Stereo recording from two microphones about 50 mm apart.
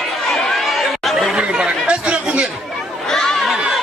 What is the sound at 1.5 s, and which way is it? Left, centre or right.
Chatter, centre.